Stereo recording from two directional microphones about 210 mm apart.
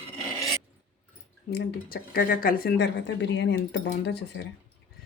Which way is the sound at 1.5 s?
45° left (ahead or behind).